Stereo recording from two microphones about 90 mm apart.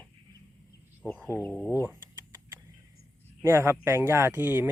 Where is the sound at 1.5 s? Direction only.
5° left (ahead or behind).